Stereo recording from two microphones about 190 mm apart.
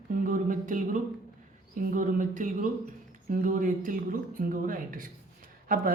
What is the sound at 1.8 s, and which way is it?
A man's voice, 45° right (ahead or behind).